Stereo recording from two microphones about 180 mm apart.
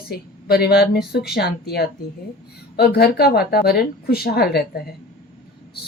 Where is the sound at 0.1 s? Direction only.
60° left (ahead or behind).